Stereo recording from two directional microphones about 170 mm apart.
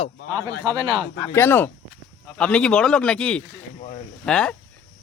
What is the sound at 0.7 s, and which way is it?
Speech, 30° right (ahead or behind).